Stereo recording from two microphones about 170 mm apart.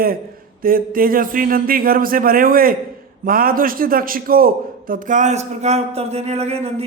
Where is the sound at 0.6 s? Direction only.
55° right (ahead or behind).